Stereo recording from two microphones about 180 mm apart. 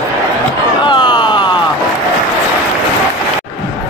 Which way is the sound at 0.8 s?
25° left (ahead or behind).